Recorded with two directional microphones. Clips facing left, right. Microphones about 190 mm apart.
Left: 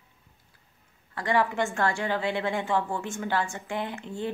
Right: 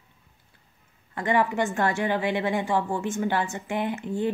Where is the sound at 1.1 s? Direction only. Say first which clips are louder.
Right 2 dB; 20° right (ahead or behind).